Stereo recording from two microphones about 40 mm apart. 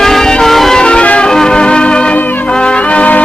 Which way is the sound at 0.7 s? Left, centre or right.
Left.